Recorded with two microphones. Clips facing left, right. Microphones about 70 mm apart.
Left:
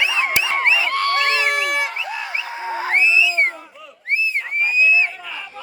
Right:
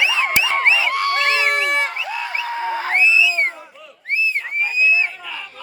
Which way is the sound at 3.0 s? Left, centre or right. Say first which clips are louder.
Right 1 dB; left.